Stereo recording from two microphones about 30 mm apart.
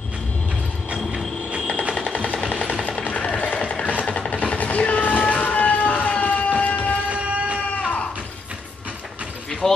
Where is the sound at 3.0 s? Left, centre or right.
Left.